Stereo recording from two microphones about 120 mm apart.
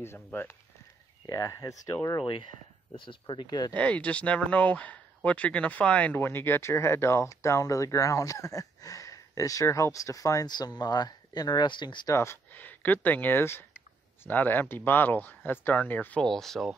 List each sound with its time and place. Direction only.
0.0 s speech: 20° left (ahead or behind)
1.2 s speech: 30° left (ahead or behind)
2.9 s speech: 45° left (ahead or behind)
3.7 s speech: 10° left (ahead or behind); by 12.1 s 40° left (ahead or behind)
12.1 s speech: 25° left (ahead or behind); by 16.7 s 5° left (ahead or behind)